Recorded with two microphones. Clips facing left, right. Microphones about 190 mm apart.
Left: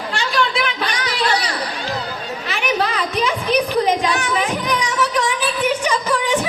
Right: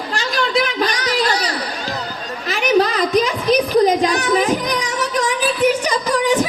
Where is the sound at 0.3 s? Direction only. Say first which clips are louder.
Right 3 dB; 40° right (ahead or behind).